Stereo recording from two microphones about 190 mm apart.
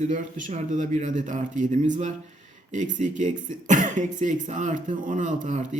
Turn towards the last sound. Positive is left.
turn(degrees=-40)  # may be behind; listen again after turning